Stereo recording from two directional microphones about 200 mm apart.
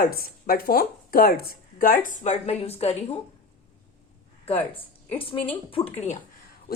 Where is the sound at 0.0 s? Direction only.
45° left (ahead or behind); by 3.2 s 30° left (ahead or behind).